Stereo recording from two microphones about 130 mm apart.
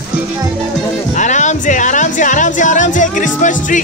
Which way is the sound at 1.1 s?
70° left (ahead or behind).